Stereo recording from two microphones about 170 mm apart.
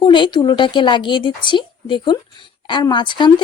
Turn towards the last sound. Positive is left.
turn(degrees=25)  # may be behind; listen again after turning